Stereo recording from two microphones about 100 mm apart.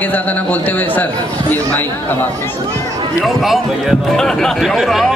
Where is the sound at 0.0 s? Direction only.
15° left (ahead or behind).